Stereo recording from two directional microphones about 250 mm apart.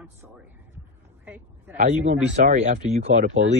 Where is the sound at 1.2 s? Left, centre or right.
Centre.